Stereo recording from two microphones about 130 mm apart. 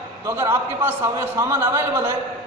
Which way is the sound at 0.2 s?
20° right (ahead or behind).